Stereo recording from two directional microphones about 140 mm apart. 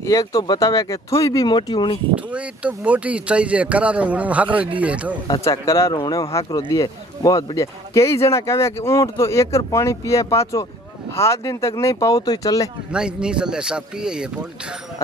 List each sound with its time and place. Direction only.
0.0 s speech: 25° left (ahead or behind)
2.1 s speech: 10° right (ahead or behind)
5.4 s speech: 20° left (ahead or behind)
12.9 s speech: 5° right (ahead or behind)